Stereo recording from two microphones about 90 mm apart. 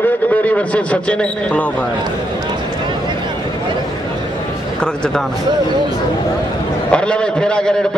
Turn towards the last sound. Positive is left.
turn(degrees=10)  # may be behind; listen again after turning